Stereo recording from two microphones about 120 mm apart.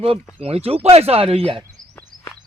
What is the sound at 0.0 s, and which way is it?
Speech, 50° right (ahead or behind).